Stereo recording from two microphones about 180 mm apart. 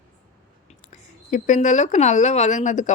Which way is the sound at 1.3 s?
45° left (ahead or behind).